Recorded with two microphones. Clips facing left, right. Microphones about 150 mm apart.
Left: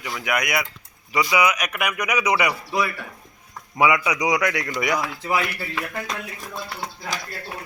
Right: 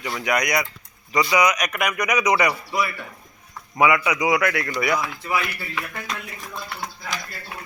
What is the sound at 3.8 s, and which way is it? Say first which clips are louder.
Speech: right 1 dB; 15° left (ahead or behind).